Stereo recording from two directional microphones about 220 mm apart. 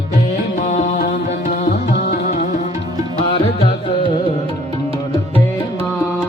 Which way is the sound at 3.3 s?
25° left (ahead or behind).